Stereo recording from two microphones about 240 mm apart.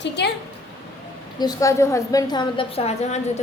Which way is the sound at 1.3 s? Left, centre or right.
Centre.